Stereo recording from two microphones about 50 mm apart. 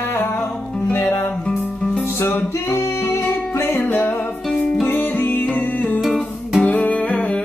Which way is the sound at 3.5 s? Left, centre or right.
Left.